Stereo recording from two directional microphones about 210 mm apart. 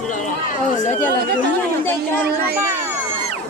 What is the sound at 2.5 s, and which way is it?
Speech, 10° right (ahead or behind).